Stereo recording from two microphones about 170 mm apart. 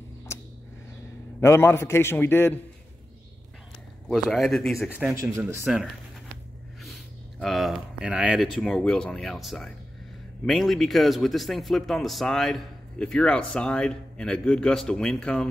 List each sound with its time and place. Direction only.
1.4 s a man's voice: 15° left (ahead or behind)
4.1 s a man's voice: centre (ahead or behind)
5.1 s speech: 20° right (ahead or behind)
7.3 s a man's voice: centre (ahead or behind)